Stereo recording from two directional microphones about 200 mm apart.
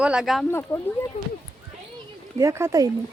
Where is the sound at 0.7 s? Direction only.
10° left (ahead or behind).